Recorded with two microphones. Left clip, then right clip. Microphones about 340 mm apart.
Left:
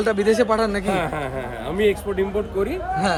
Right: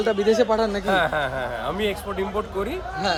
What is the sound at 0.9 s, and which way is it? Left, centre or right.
A man's voice, centre.